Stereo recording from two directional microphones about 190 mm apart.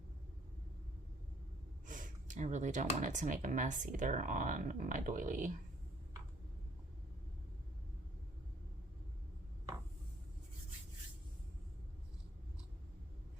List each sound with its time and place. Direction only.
1.9 s speech: 40° right (ahead or behind)